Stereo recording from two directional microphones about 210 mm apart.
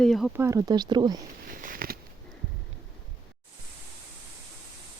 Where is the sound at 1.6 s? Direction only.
40° right (ahead or behind).